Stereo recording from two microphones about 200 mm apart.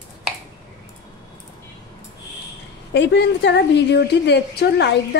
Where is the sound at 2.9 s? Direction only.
60° left (ahead or behind).